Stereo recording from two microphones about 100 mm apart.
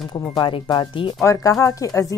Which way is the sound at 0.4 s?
50° left (ahead or behind).